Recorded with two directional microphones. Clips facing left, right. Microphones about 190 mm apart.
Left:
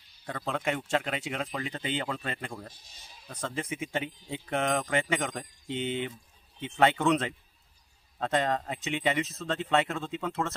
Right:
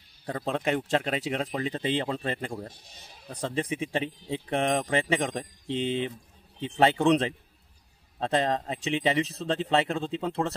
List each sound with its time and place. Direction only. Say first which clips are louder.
0.3 s speech: right 4 dB; 30° right (ahead or behind)
2.7 s speech: right 5 dB; 60° right (ahead or behind)
3.3 s speech: right 5 dB; 30° right (ahead or behind)